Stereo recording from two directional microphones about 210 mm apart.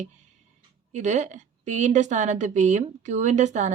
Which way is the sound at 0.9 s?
35° right (ahead or behind).